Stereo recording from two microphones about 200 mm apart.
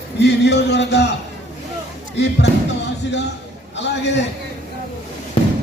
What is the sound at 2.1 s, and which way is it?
A man's voice, 60° left (ahead or behind).